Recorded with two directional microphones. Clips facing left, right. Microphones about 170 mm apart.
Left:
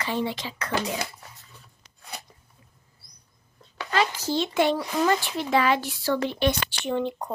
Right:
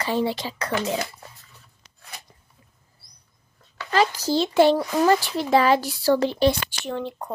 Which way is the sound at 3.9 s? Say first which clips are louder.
Right 4 dB; 40° right (ahead or behind).